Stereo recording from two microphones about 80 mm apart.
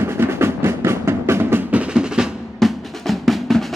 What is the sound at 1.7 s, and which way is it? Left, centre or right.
Music, centre.